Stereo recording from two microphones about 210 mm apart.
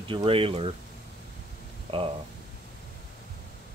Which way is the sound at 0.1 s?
25° right (ahead or behind).